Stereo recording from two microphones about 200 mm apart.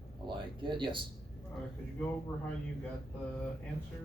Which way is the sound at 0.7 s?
25° right (ahead or behind).